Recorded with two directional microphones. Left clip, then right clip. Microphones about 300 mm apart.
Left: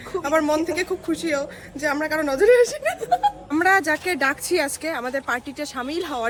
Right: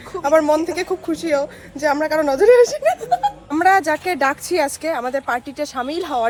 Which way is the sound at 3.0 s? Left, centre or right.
Centre.